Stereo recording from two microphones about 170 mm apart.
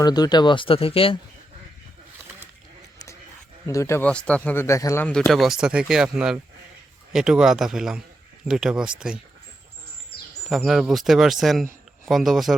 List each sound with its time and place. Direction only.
0.0 s speech: 25° left (ahead or behind)
3.7 s a man's voice: 15° left (ahead or behind)
5.0 s speech: 5° left (ahead or behind)
10.5 s speech: centre (ahead or behind)